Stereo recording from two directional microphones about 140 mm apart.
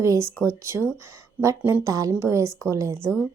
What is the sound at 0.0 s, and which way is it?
A woman's voice, 20° right (ahead or behind).